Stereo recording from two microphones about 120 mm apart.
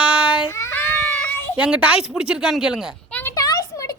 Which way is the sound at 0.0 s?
10° right (ahead or behind).